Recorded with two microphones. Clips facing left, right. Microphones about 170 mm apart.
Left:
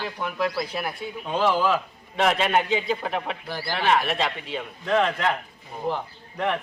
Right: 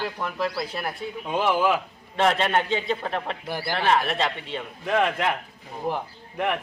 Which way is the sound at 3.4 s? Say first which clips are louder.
Right 2 dB; 15° right (ahead or behind).